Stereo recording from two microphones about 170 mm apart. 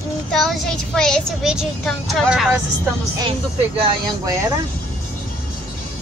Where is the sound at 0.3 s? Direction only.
Centre (ahead or behind).